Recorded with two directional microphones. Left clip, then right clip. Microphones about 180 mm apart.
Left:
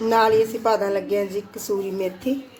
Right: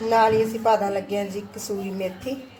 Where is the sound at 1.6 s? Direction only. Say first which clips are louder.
Left 4 dB; 45° left (ahead or behind).